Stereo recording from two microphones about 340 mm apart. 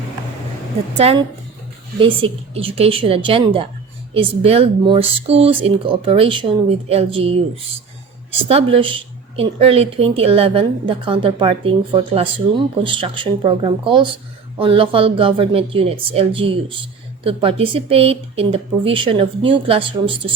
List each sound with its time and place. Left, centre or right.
0.9 s a woman's voice: centre
8.4 s a woman's voice: centre